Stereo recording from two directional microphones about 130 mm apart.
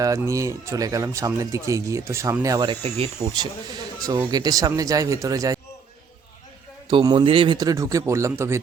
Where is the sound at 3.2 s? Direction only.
40° right (ahead or behind).